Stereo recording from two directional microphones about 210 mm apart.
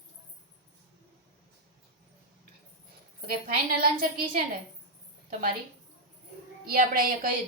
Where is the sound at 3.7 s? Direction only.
45° right (ahead or behind).